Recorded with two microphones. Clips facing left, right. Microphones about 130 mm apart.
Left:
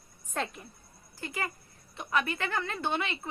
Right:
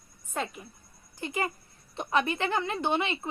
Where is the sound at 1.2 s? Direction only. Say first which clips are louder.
Right 5 dB; 20° right (ahead or behind).